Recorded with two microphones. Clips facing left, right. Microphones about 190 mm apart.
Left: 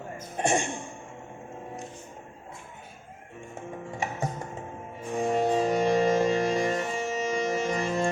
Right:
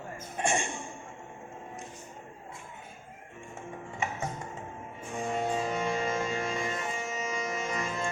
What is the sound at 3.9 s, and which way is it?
Music, 35° left (ahead or behind).